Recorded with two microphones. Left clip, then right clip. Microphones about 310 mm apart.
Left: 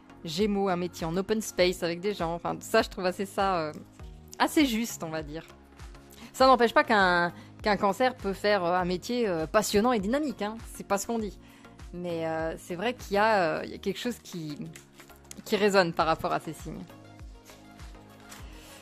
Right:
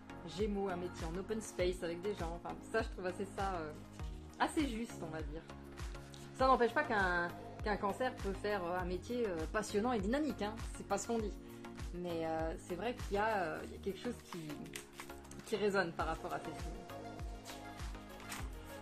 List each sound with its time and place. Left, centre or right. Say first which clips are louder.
0.4 s speech: left 11 dB; left
15.5 s speech: left 12 dB; left